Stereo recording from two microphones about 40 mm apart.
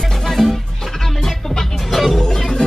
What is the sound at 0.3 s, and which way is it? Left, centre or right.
Music, centre.